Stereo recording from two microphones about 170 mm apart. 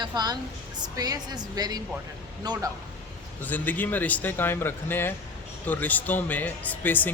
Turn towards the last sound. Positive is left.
turn(degrees=10)  # may be behind; listen again after turning